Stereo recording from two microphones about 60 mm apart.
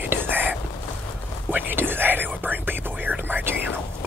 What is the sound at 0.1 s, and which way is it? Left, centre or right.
Whispering, right.